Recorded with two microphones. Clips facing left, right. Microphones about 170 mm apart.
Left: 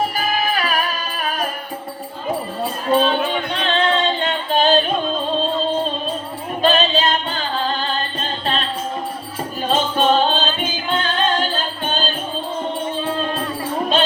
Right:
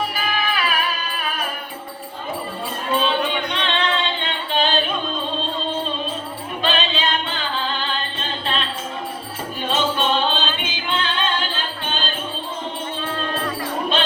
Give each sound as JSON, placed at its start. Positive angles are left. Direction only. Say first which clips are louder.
{"t": 0.0, "sound": "music", "louder": "left 3 dB", "side_deg": 40}
{"t": 2.9, "sound": "music", "louder": "left 4 dB", "side_deg": 40}
{"t": 6.6, "sound": "music", "louder": "left 6 dB", "side_deg": 40}
{"t": 9.6, "sound": "music", "louder": "left 4 dB", "side_deg": 40}